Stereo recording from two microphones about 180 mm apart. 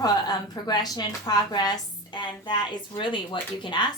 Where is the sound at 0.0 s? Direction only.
20° left (ahead or behind).